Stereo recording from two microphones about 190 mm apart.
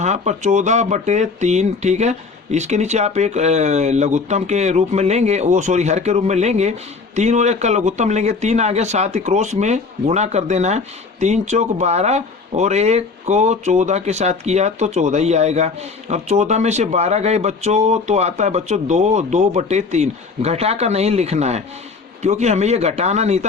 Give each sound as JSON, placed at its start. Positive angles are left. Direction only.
{"t": 0.0, "sound": "speech", "side_deg": -40}